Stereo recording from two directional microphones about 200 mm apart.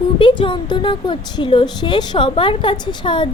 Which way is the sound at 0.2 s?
25° left (ahead or behind).